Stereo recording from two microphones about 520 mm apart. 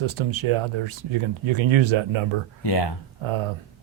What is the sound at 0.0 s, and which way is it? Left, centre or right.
Speech, right.